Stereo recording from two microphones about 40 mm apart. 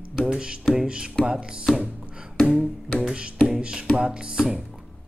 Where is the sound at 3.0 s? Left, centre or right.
Right.